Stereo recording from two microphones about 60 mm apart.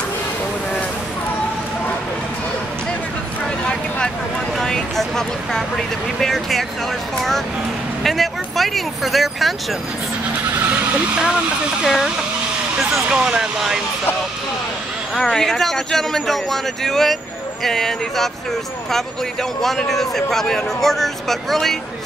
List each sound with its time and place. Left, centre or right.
4.6 s a sound: centre
8.0 s speech: centre
10.6 s vehicle: right
11.8 s speech: centre
13.1 s speech: centre
15.1 s speech: centre
19.6 s speech: centre